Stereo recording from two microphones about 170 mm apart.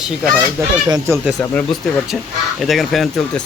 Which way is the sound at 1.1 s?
Centre (ahead or behind).